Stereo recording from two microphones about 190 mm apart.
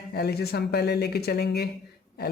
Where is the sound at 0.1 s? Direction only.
55° left (ahead or behind).